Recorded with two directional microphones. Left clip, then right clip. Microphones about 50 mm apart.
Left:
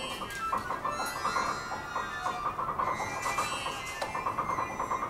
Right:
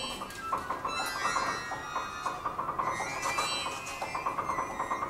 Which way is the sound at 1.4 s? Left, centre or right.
Right.